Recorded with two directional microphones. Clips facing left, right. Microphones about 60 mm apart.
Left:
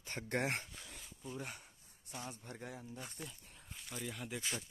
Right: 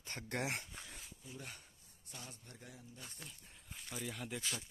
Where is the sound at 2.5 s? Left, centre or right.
Left.